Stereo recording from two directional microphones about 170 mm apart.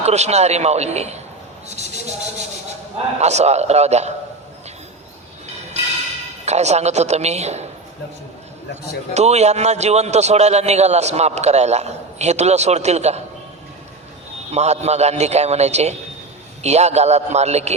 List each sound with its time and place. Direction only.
0.0 s a man's voice: 40° right (ahead or behind)
3.2 s a man's voice: 40° right (ahead or behind)
6.4 s a man's voice: 40° right (ahead or behind)
9.1 s a man's voice: 40° right (ahead or behind)
14.5 s a man's voice: 40° right (ahead or behind)